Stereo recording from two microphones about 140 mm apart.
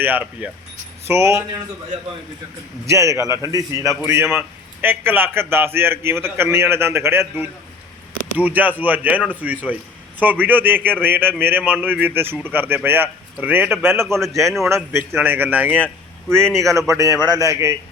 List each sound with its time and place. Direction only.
0.0 s a man's voice: 15° right (ahead or behind)
2.9 s a man's voice: 20° right (ahead or behind)